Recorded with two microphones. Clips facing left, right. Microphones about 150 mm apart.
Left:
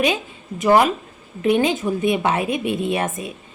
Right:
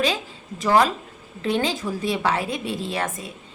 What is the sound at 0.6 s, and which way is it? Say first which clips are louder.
A woman's voice: left 3 dB; 20° left (ahead or behind).